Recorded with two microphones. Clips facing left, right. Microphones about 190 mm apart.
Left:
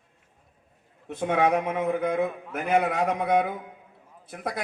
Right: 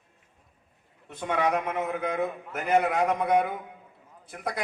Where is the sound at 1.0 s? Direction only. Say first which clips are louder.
Left 4 dB; 50° left (ahead or behind).